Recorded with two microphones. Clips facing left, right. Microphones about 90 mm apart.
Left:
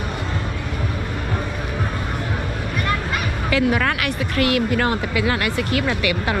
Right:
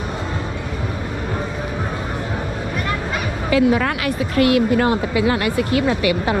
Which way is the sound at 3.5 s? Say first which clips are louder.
Right 3 dB; 30° right (ahead or behind).